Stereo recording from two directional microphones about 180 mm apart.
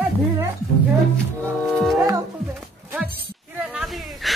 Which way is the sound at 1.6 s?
Centre (ahead or behind).